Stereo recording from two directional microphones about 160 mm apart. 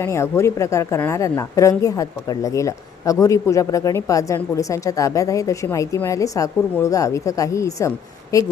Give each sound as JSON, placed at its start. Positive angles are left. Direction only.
{"t": 0.0, "sound": "a woman's voice", "side_deg": 15}